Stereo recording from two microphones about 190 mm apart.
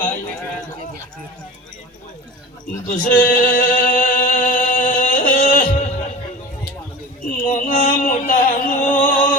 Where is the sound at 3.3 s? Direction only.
45° left (ahead or behind).